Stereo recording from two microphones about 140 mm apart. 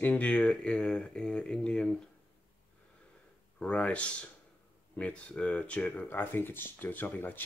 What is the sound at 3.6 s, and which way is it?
Speech, 10° left (ahead or behind).